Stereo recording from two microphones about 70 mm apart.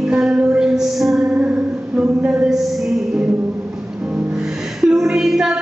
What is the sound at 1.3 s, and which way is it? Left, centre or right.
Music, centre.